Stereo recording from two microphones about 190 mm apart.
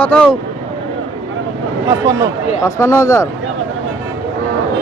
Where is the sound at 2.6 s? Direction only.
15° left (ahead or behind).